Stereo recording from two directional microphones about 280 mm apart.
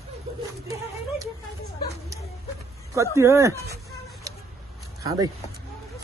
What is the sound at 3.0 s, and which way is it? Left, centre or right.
Speech, centre.